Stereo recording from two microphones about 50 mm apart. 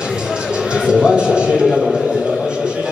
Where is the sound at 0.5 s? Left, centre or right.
Centre.